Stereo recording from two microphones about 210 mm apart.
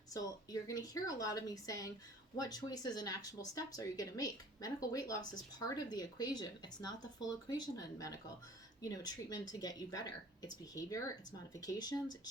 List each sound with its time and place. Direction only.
0.1 s speech: 15° left (ahead or behind)